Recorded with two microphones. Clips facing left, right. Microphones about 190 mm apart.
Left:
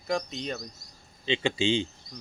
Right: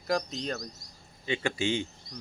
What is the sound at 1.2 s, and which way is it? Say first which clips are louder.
Speech: left 3 dB; 25° left (ahead or behind).